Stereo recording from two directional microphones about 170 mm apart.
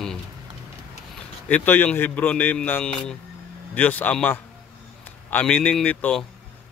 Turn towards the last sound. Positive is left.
turn(degrees=5)  # may be behind; listen again after turning